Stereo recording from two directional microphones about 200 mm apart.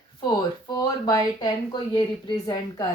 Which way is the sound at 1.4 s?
25° left (ahead or behind).